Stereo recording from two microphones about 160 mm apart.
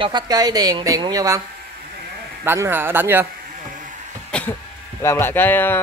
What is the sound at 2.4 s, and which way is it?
Speech, 15° right (ahead or behind).